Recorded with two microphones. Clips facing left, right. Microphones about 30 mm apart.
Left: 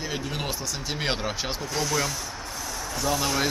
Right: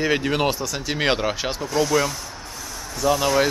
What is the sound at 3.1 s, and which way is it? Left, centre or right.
Speech, centre.